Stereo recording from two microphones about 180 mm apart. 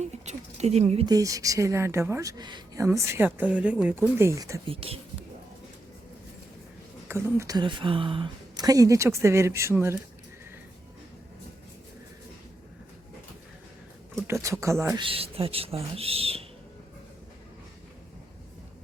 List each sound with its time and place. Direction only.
0.0 s speech: 40° right (ahead or behind)
1.0 s speech: 20° right (ahead or behind)
4.6 s speech: 30° right (ahead or behind)
7.1 s speech: 15° right (ahead or behind)
14.3 s speech: 15° right (ahead or behind)
14.9 s speech: 30° right (ahead or behind)